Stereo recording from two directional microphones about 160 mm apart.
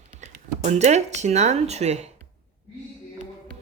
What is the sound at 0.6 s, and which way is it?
Speech, 45° right (ahead or behind).